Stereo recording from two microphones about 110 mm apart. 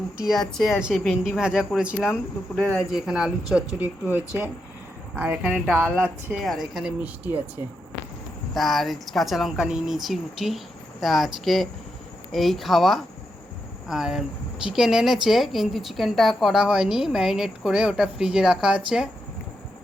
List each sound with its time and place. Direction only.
0.2 s a woman's voice: centre (ahead or behind)
2.6 s speech: 10° left (ahead or behind)
2.9 s a woman's voice: 5° right (ahead or behind)
6.4 s speech: centre (ahead or behind)
7.0 s a woman's voice: 15° right (ahead or behind)
8.5 s speech: centre (ahead or behind)